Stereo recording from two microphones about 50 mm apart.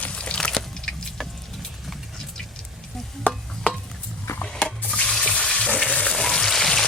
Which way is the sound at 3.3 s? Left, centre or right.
Left.